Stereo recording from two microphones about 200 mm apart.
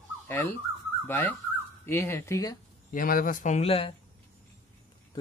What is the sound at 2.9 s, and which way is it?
Speech, 45° left (ahead or behind).